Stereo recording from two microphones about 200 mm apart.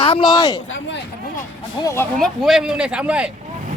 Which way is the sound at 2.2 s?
Centre (ahead or behind).